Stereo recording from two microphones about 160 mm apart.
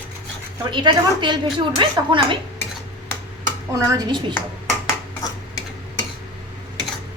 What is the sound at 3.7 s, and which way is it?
Speech, 25° right (ahead or behind).